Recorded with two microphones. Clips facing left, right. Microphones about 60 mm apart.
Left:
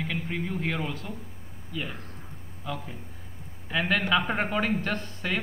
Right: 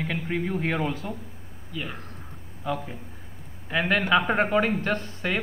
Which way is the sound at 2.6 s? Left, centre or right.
Centre.